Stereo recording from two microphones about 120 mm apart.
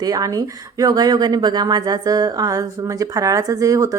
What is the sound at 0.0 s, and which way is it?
Speech, 30° right (ahead or behind).